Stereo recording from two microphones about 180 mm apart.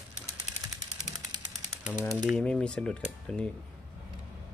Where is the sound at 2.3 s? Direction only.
5° left (ahead or behind).